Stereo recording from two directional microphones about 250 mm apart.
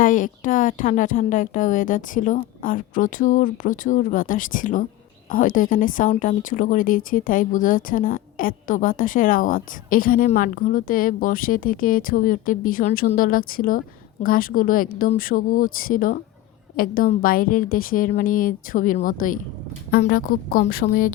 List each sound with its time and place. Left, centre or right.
0.0 s speech: left